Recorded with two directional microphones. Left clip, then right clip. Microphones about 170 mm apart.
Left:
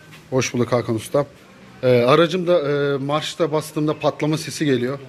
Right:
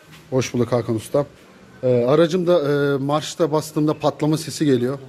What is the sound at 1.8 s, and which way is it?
Speech, 10° right (ahead or behind).